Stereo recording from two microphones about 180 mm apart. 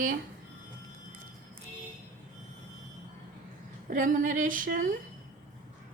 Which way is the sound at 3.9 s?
45° right (ahead or behind).